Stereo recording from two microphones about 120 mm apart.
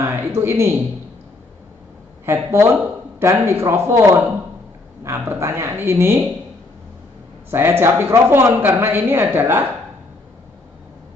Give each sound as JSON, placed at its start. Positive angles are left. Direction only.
{"t": 0.0, "sound": "speech", "side_deg": -20}
{"t": 2.2, "sound": "speech", "side_deg": -20}
{"t": 7.5, "sound": "a woman's voice", "side_deg": -20}